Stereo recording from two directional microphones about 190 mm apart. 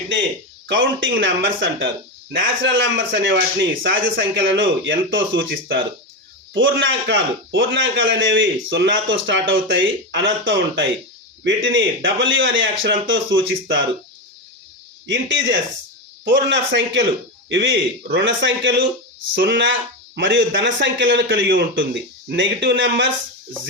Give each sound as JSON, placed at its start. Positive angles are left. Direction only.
{"t": 0.7, "sound": "a man's voice", "side_deg": -80}
{"t": 15.1, "sound": "speech", "side_deg": -70}